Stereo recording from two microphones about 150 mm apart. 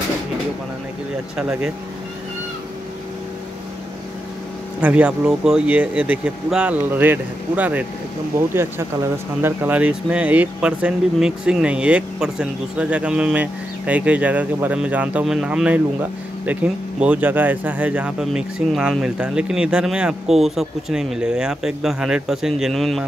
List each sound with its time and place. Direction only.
1.3 s speech: 5° right (ahead or behind)
4.8 s speech: 10° right (ahead or behind)